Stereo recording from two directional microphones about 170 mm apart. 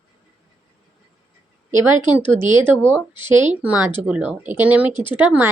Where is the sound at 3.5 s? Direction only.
10° right (ahead or behind).